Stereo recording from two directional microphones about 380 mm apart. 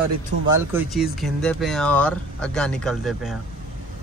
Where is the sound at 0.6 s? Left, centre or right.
Centre.